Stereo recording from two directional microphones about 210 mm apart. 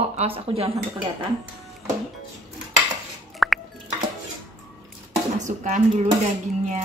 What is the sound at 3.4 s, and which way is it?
Plop, centre (ahead or behind).